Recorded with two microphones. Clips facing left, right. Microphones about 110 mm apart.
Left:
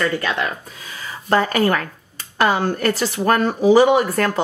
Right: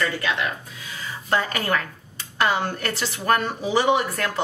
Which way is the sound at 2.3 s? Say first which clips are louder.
Left 5 dB; 45° left (ahead or behind).